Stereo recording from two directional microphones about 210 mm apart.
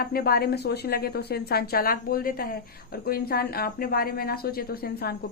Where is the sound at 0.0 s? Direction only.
45° left (ahead or behind).